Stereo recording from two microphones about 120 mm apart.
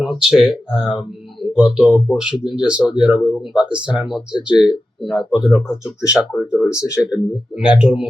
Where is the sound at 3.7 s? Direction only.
10° right (ahead or behind).